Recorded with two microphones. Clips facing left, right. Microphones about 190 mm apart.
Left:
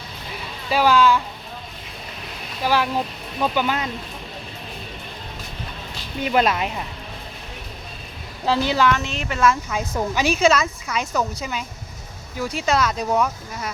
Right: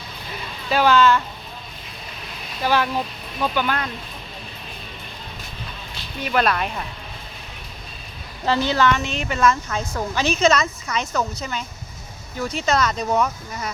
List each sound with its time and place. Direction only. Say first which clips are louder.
0.3 s music: even; 5° left (ahead or behind)
2.6 s a woman's voice: even; 5° left (ahead or behind)
6.2 s a woman's voice: left 1 dB; 20° left (ahead or behind)
8.4 s a woman's voice: even; 5° left (ahead or behind)